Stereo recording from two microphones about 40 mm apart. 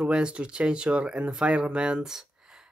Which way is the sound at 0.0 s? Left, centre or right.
Right.